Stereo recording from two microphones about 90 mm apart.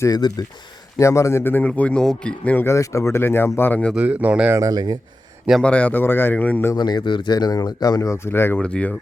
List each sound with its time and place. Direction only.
0.0 s speech: 45° left (ahead or behind)
0.9 s a man's voice: 35° left (ahead or behind); by 2.6 s 15° left (ahead or behind)
2.6 s a man's voice: 35° left (ahead or behind); by 3.9 s 15° left (ahead or behind)
3.9 s speech: 15° right (ahead or behind)
4.5 s speech: 40° right (ahead or behind)
5.6 s a man's voice: 15° left (ahead or behind)
6.7 s speech: 50° left (ahead or behind); by 8.5 s 25° left (ahead or behind)
8.5 s speech: 15° left (ahead or behind)